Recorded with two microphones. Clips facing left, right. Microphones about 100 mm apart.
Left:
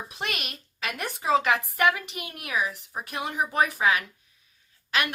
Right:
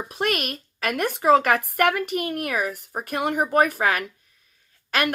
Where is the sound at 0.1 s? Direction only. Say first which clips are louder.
Right 12 dB; 50° right (ahead or behind).